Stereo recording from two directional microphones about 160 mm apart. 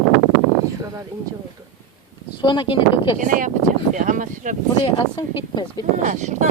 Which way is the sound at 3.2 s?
55° right (ahead or behind).